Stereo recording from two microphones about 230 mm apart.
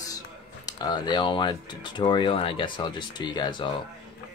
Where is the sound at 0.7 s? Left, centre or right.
Centre.